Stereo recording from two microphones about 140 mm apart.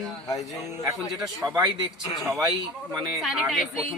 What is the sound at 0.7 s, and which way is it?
Speech, 15° right (ahead or behind).